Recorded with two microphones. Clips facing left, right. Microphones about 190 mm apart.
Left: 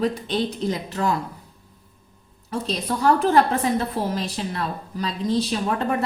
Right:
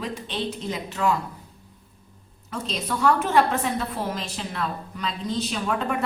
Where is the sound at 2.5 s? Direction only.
35° left (ahead or behind).